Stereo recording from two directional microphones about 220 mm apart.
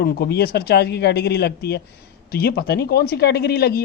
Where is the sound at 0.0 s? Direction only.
45° left (ahead or behind).